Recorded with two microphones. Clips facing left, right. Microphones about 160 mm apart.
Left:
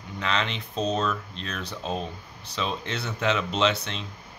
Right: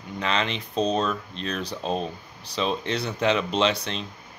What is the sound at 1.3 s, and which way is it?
Speech, centre (ahead or behind).